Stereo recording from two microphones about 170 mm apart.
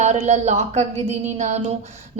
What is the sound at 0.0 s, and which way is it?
A woman's voice, 40° right (ahead or behind).